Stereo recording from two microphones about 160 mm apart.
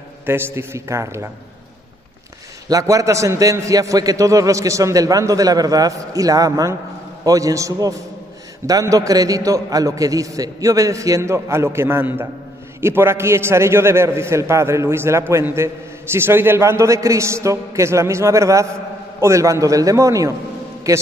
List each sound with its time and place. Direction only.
0.3 s a man's voice: 15° right (ahead or behind)
2.7 s a man's voice: 20° right (ahead or behind)